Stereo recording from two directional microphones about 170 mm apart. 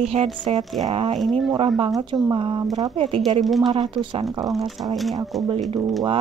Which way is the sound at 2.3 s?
30° right (ahead or behind).